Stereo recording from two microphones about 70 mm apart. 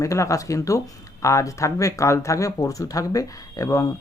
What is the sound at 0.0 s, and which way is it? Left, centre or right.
Speech, left.